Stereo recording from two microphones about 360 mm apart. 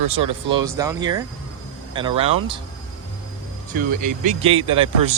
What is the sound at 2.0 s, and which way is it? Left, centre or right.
Speech, centre.